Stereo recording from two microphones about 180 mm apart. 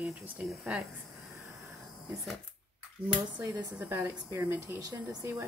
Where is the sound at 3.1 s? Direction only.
25° right (ahead or behind).